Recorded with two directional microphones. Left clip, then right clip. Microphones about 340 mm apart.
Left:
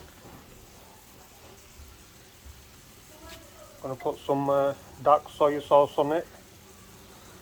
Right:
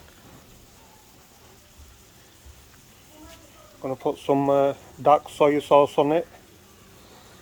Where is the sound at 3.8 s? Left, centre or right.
Right.